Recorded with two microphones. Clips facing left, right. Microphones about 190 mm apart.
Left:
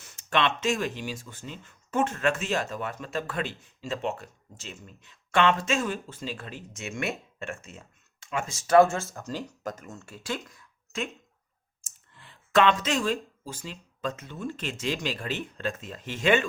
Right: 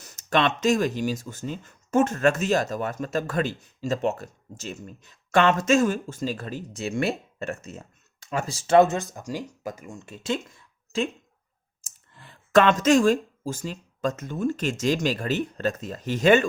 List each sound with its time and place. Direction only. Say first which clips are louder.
0.0 s speech: right 3 dB; 40° right (ahead or behind)
11.9 s speech: right 4 dB; 45° right (ahead or behind)